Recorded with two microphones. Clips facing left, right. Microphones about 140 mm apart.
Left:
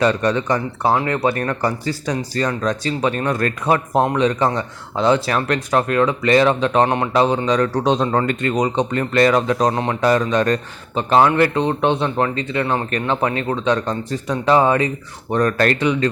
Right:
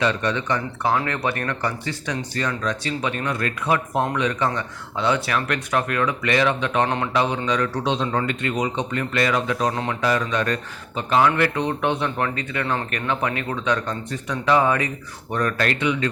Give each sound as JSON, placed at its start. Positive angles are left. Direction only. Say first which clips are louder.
{"t": 0.0, "sound": "speech", "louder": "left 5 dB", "side_deg": 40}